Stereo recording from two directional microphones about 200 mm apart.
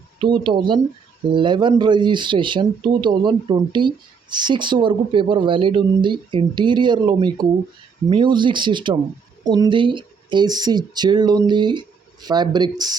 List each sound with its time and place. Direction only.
0.2 s speech: 25° right (ahead or behind)